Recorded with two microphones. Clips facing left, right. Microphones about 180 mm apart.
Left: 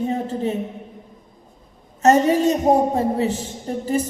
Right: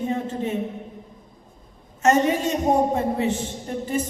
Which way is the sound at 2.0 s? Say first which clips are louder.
Left 4 dB; 35° left (ahead or behind).